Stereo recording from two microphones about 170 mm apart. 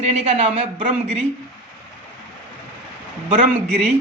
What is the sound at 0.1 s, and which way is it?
A woman's voice, 40° right (ahead or behind).